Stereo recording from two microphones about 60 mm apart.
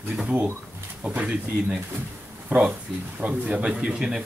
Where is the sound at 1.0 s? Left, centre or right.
Right.